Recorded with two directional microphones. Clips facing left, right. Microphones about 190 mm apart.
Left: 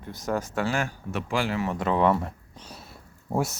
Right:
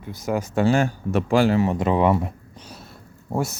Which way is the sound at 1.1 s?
40° right (ahead or behind).